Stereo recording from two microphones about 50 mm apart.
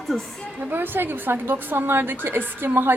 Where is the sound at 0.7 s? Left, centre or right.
Right.